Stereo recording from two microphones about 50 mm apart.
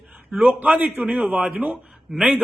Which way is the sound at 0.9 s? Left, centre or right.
Right.